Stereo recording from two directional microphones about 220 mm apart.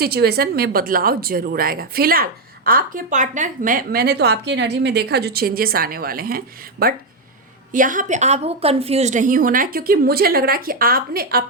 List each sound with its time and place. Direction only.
0.0 s a woman's voice: 45° right (ahead or behind)